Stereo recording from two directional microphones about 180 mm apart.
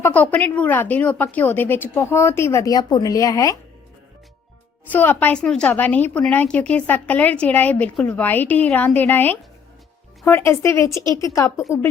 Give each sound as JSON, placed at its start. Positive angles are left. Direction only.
{"t": 0.0, "sound": "a woman's voice", "side_deg": 10}
{"t": 4.9, "sound": "a woman's voice", "side_deg": 10}